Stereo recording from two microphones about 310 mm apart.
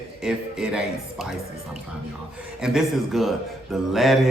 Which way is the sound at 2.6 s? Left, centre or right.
Centre.